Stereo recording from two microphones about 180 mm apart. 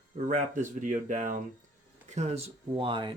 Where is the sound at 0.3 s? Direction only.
45° right (ahead or behind).